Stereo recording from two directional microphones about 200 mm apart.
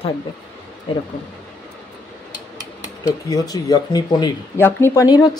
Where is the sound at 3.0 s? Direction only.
20° left (ahead or behind).